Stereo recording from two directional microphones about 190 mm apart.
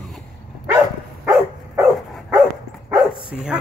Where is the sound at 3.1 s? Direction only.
50° left (ahead or behind).